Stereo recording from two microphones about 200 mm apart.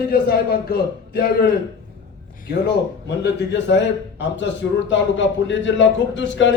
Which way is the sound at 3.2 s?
60° left (ahead or behind).